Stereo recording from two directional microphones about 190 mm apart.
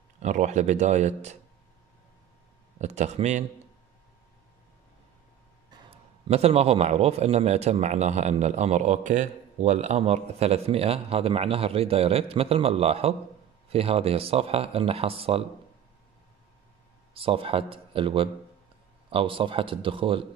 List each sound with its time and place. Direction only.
0.2 s a man's voice: 40° right (ahead or behind)
2.8 s a man's voice: 35° right (ahead or behind)
5.9 s a man's voice: 30° right (ahead or behind)
17.1 s speech: 30° right (ahead or behind)